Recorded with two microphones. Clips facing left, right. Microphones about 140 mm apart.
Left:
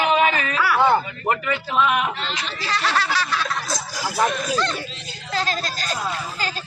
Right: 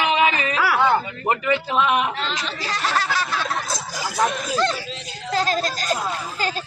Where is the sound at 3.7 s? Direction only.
5° left (ahead or behind).